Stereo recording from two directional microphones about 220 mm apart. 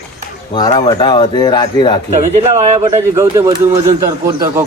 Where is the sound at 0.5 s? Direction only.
20° left (ahead or behind).